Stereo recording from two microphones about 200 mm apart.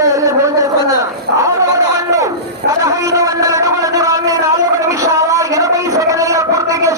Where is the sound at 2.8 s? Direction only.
15° right (ahead or behind).